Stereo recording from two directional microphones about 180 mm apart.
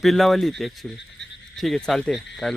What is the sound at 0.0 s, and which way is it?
Speech, centre (ahead or behind).